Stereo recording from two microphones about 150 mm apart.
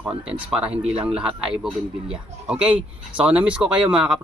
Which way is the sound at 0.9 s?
35° right (ahead or behind).